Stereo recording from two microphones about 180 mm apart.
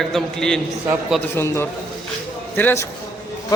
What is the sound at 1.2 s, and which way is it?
Speech, 10° left (ahead or behind).